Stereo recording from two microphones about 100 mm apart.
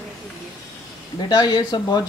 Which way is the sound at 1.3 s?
40° left (ahead or behind).